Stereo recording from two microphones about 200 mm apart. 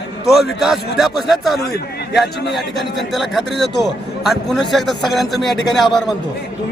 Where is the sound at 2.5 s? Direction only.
Centre (ahead or behind).